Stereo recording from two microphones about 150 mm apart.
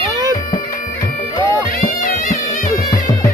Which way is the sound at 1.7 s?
70° left (ahead or behind).